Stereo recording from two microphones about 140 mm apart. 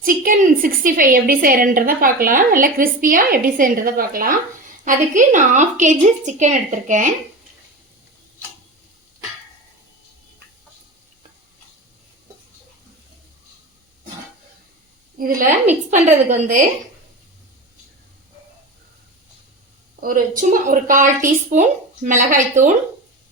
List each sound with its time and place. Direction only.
0.0 s a woman's voice: 85° right
4.9 s a woman's voice: 65° right (ahead or behind)
15.2 s a woman's voice: 80° right
15.9 s a woman's voice: 60° right (ahead or behind)
20.0 s a woman's voice: 80° right; by 22.7 s 65° right (ahead or behind)